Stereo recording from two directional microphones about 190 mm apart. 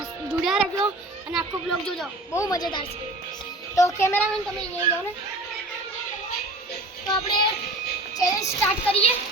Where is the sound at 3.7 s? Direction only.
15° left (ahead or behind).